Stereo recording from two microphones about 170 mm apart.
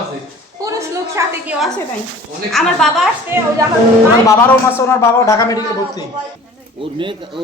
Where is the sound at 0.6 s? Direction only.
20° right (ahead or behind).